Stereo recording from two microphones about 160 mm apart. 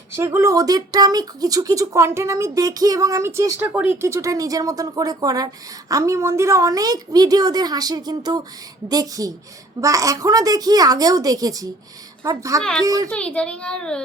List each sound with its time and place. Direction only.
0.1 s speech: 15° right (ahead or behind)
13.1 s a child's voice: 5° left (ahead or behind)